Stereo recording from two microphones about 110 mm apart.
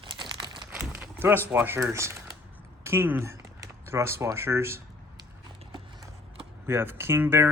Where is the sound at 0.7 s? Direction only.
20° right (ahead or behind).